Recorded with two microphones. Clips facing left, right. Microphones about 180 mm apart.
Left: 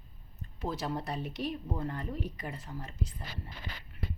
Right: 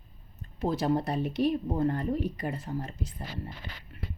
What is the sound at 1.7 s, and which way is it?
Speech, 45° right (ahead or behind).